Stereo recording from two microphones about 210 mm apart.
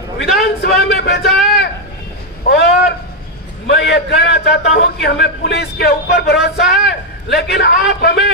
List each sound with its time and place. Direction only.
0.6 s speech: 50° left (ahead or behind)
1.2 s a sound: centre (ahead or behind)
2.4 s a sound: 55° left (ahead or behind)
3.6 s a man's voice: 55° left (ahead or behind)
6.6 s a man's voice: centre (ahead or behind)
6.9 s a man's voice: 50° left (ahead or behind)